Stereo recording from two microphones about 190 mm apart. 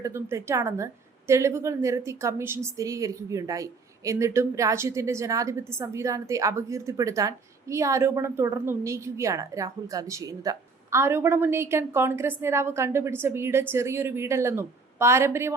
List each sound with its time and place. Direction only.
0.0 s a woman's voice: 15° right (ahead or behind)